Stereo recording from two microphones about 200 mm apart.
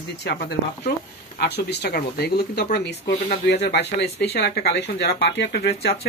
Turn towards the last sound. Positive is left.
turn(degrees=55)  # may be behind; listen again after turning